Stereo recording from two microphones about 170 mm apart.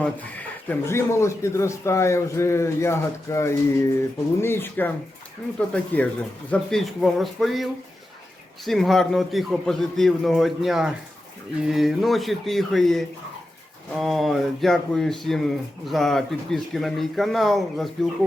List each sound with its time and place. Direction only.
0.7 s a man's voice: 15° left (ahead or behind)